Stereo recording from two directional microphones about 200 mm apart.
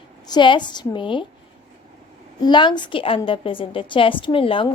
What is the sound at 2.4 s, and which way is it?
A woman's voice, 20° left (ahead or behind).